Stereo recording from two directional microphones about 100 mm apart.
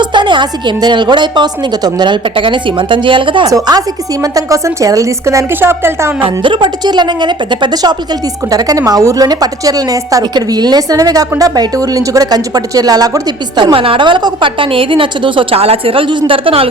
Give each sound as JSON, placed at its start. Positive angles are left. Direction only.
{"t": 0.0, "sound": "a woman's voice", "side_deg": -50}
{"t": 3.4, "sound": "a woman's voice", "side_deg": -35}
{"t": 6.2, "sound": "a woman's voice", "side_deg": -55}